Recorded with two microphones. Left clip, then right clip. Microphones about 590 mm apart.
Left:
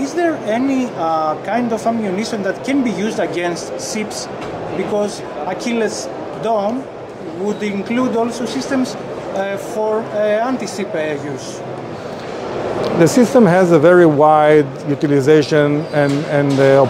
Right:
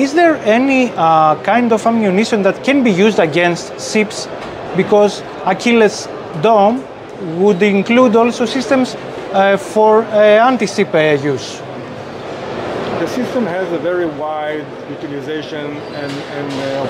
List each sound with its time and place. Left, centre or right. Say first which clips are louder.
0.0 s speech: right 7 dB; right
13.0 s speech: left 11 dB; left